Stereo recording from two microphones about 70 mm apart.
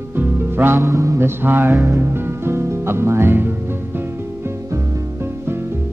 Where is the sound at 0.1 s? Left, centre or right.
Right.